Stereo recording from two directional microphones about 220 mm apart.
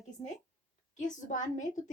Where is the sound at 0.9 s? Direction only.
35° left (ahead or behind).